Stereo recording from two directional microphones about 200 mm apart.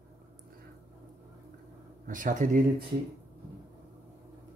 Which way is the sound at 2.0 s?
40° right (ahead or behind).